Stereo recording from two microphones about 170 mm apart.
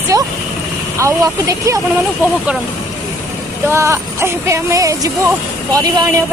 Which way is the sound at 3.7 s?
15° right (ahead or behind).